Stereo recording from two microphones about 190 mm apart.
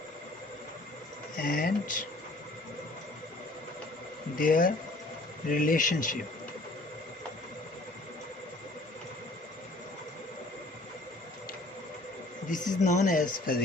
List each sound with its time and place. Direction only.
1.4 s speech: 50° left (ahead or behind)
4.4 s speech: 50° left (ahead or behind)
12.5 s speech: 40° left (ahead or behind)